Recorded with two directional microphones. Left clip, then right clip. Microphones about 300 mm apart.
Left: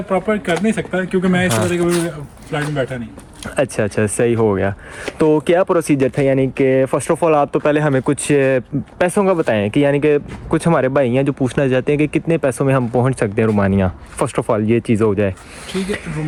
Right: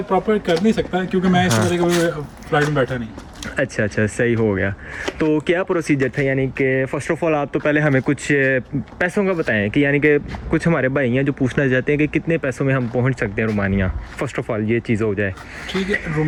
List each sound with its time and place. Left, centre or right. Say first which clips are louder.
0.1 s speech: even; centre
3.5 s speech: left 3 dB; centre